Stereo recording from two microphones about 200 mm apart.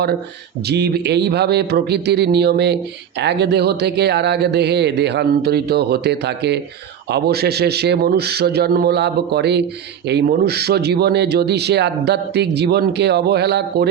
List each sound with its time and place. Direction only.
0.7 s a man's voice: 55° right (ahead or behind)